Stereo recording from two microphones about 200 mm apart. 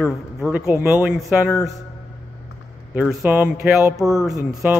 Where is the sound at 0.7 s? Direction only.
10° right (ahead or behind).